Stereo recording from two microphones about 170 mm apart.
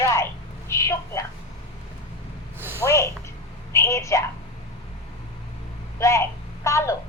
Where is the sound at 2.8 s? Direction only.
15° left (ahead or behind).